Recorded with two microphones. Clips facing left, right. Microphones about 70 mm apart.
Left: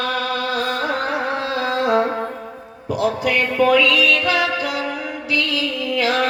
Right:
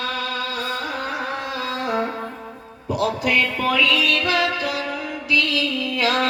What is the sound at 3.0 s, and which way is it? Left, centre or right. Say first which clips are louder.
Music: left 1 dB; left.